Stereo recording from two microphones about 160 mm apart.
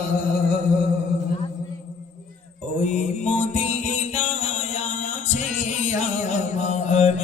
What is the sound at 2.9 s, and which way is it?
Mantra, 45° left (ahead or behind).